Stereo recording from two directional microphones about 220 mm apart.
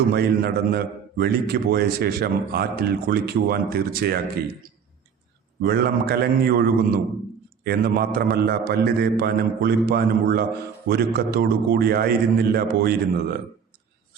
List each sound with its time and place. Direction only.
0.1 s speech: 45° right (ahead or behind)
5.6 s speech: 45° right (ahead or behind)